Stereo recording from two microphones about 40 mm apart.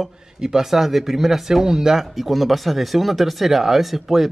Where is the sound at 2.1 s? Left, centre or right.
Centre.